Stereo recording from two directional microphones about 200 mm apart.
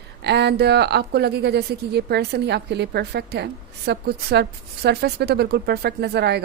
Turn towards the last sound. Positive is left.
turn(degrees=-55)  # may be behind; listen again after turning